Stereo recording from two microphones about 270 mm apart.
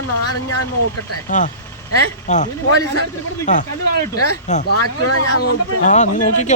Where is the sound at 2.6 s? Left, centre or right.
Left.